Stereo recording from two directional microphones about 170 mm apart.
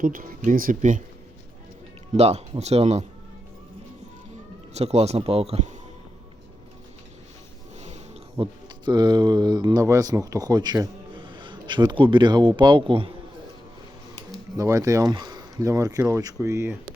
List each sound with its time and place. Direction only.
0.0 s speech: 55° right (ahead or behind)
2.1 s speech: 40° right (ahead or behind)
4.7 s speech: 40° right (ahead or behind)
7.8 s sniff: 40° right (ahead or behind)
8.4 s speech: 25° right (ahead or behind)
14.5 s speech: 20° right (ahead or behind)